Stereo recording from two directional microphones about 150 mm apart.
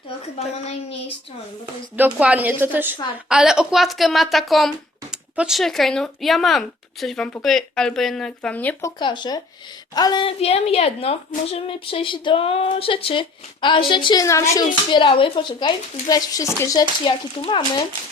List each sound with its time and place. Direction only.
0.3 s speech: 45° left (ahead or behind)
2.0 s a woman's voice: 10° right (ahead or behind); by 8.9 s 10° left (ahead or behind)
9.0 s speech: 30° left (ahead or behind)
14.8 s speech: 30° left (ahead or behind)